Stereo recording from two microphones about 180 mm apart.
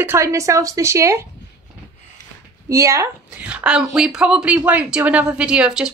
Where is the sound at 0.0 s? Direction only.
15° right (ahead or behind).